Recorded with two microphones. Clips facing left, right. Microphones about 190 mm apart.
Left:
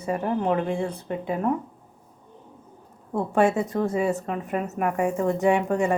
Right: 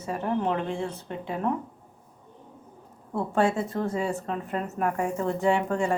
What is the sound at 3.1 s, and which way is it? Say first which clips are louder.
A woman's voice: left 3 dB; 15° left (ahead or behind).